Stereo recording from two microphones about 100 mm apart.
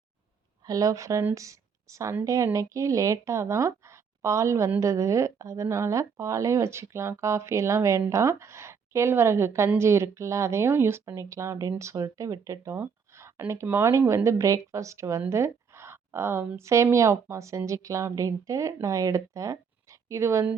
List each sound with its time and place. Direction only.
0.6 s speech: 35° right (ahead or behind)
15.3 s a sound: 25° right (ahead or behind)
16.6 s speech: 30° right (ahead or behind)